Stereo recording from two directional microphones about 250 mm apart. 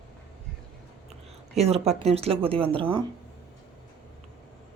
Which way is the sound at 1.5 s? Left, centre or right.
Right.